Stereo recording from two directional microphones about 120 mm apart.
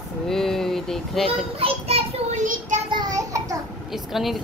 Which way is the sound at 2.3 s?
90° right.